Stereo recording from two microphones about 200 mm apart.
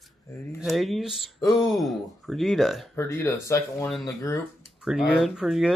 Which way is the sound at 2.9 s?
15° left (ahead or behind).